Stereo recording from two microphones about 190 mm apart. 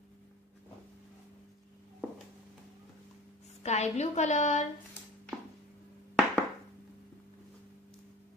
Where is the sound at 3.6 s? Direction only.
35° left (ahead or behind).